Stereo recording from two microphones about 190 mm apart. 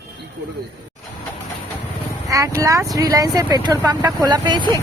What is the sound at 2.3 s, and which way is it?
Speech, 15° right (ahead or behind).